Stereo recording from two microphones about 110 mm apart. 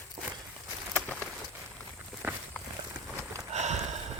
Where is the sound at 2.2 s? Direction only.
15° right (ahead or behind).